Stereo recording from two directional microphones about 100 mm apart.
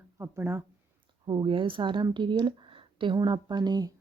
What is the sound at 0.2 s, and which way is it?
Speech, 25° right (ahead or behind).